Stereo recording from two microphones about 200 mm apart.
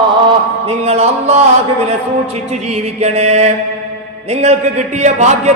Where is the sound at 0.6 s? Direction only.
30° right (ahead or behind).